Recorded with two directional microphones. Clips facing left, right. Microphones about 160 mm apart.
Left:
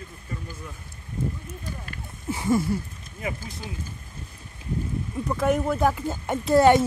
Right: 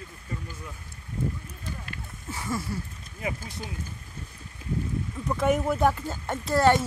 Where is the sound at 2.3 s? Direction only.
20° left (ahead or behind).